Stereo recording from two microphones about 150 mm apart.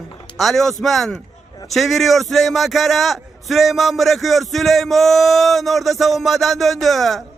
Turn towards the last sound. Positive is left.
turn(degrees=0)  # may be behind; listen again after turning